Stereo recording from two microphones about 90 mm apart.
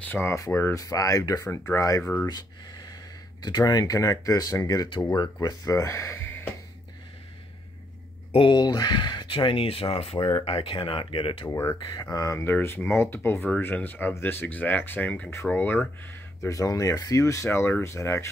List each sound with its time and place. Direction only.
0.0 s speech: 20° left (ahead or behind)
0.3 s speech: 30° left (ahead or behind)
0.7 s speech: 40° left (ahead or behind)
2.2 s speech: 50° left (ahead or behind)
5.1 s speech: 55° left (ahead or behind); by 6.1 s 35° left (ahead or behind)
6.1 s a sound: 20° left (ahead or behind)
8.3 s speech: 85° left
8.5 s speech: 55° left (ahead or behind); by 11.4 s 80° left
11.4 s speech: 30° left (ahead or behind)
11.9 s speech: 45° left (ahead or behind)
12.4 s speech: 25° left (ahead or behind)
16.4 s speech: 40° left (ahead or behind)